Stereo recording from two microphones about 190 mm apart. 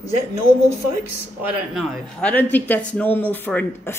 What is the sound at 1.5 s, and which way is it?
A man's voice, centre (ahead or behind).